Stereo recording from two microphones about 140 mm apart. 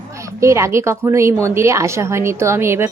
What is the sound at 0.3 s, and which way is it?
A woman's voice, 20° right (ahead or behind).